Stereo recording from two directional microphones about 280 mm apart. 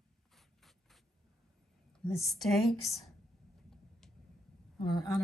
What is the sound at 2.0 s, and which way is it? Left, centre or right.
A woman's voice, centre.